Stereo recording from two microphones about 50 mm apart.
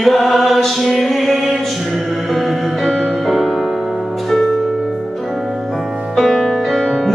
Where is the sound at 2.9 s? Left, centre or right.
Centre.